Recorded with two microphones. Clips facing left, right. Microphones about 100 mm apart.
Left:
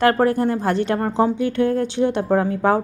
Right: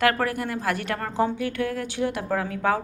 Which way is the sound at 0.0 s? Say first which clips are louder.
Left 7 dB; 30° left (ahead or behind).